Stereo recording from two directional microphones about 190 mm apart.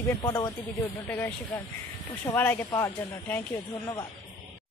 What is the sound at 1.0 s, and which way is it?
Speech, 10° left (ahead or behind).